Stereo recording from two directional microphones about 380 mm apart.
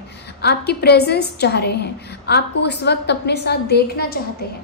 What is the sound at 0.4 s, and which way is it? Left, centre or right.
A woman's voice, left.